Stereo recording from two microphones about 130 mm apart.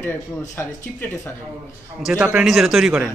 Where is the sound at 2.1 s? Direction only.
5° right (ahead or behind).